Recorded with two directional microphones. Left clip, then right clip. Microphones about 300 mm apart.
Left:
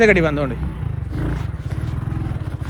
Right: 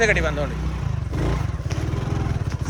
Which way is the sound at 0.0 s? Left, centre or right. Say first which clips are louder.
Left 5 dB; centre.